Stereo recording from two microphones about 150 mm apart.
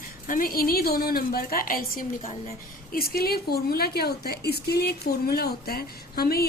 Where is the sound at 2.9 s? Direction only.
90° left.